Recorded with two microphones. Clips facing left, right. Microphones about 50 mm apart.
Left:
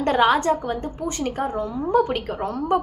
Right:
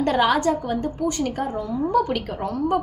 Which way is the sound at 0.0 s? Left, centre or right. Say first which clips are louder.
Left 1 dB; left.